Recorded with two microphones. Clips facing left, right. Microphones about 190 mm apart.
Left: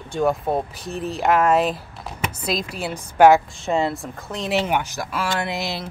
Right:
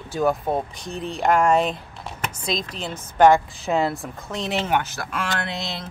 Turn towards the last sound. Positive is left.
turn(degrees=10)  # may be behind; listen again after turning